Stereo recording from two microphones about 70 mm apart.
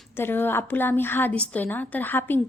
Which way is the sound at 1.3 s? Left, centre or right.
Centre.